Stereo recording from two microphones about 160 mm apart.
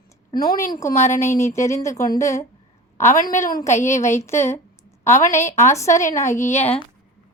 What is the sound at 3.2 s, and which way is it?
Speech, 55° left (ahead or behind).